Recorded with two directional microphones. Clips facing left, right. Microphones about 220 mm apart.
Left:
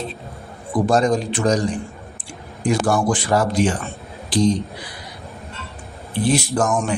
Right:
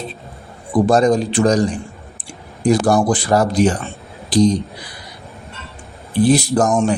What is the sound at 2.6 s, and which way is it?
Speech, 40° right (ahead or behind).